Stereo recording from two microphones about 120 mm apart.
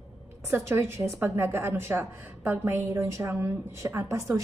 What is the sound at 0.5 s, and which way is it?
A woman's voice, 20° right (ahead or behind).